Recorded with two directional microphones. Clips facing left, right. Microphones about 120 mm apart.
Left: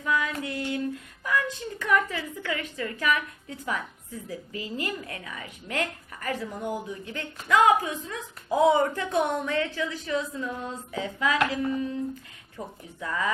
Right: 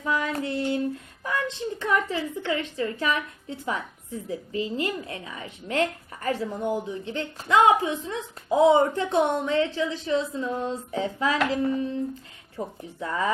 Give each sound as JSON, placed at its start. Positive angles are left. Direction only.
{"t": 0.0, "sound": "child singing", "side_deg": -30}
{"t": 1.2, "sound": "a woman's voice", "side_deg": -30}